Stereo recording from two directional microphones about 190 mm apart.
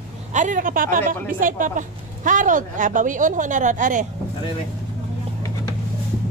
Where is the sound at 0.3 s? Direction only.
40° right (ahead or behind).